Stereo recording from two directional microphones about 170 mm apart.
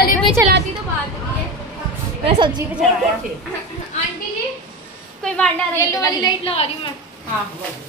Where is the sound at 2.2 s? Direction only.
30° right (ahead or behind).